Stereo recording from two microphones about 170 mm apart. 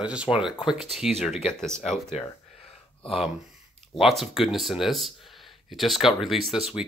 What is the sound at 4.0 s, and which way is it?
Speech, centre (ahead or behind).